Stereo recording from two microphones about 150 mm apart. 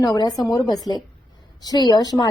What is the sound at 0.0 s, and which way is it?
A woman's voice, 25° left (ahead or behind).